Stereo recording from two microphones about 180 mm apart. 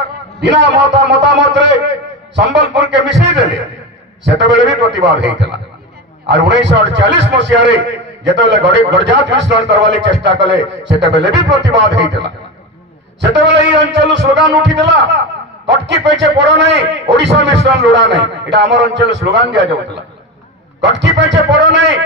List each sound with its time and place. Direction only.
0.4 s a man's voice: 75° right (ahead or behind)
20.8 s a man's voice: 75° right (ahead or behind)